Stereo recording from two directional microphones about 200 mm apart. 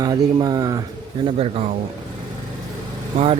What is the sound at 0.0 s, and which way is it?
Speech, 20° right (ahead or behind).